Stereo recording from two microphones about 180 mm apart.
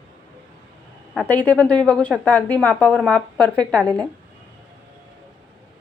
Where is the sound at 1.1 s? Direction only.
5° left (ahead or behind).